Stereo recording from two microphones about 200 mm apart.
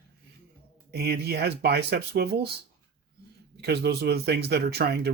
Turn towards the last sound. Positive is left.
turn(degrees=-55)  # may be behind; listen again after turning